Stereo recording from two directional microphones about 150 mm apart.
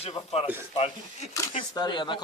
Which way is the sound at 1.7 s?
30° left (ahead or behind).